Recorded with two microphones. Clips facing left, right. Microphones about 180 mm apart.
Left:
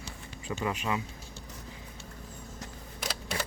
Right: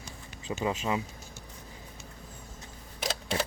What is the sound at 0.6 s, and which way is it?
Speech, 25° right (ahead or behind).